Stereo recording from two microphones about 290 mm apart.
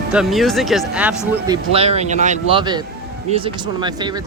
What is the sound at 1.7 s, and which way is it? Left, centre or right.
Speech, right.